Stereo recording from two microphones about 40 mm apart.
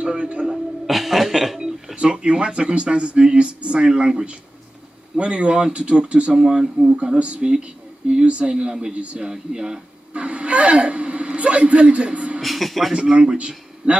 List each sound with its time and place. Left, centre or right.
0.8 s cough: centre
2.0 s speech: right
6.3 s speech: centre
7.0 s speech: right
9.2 s speech: centre
10.1 s speech: right
12.4 s speech: centre
12.9 s speech: right